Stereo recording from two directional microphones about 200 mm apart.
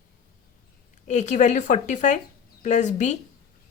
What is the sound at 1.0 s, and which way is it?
A woman's voice, 35° left (ahead or behind).